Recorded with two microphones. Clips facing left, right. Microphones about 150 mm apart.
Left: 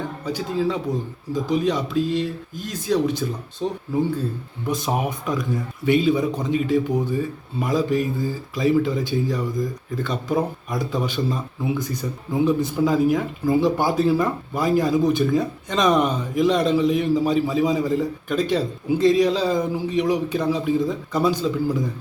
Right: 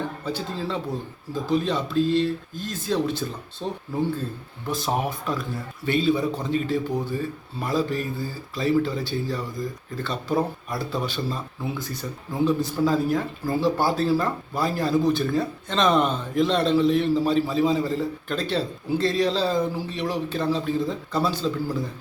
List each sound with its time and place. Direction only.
0.3 s speech: 10° left (ahead or behind)